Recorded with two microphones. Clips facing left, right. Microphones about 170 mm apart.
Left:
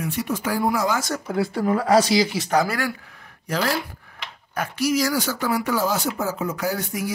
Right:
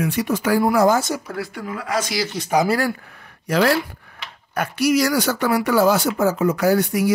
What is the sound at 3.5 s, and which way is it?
Speech, 75° right (ahead or behind).